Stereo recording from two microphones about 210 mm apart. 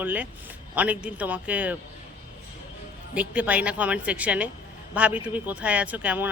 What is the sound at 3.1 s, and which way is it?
Speech, 5° right (ahead or behind).